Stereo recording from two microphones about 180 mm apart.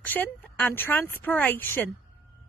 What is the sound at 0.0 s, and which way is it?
A woman's voice, 10° left (ahead or behind).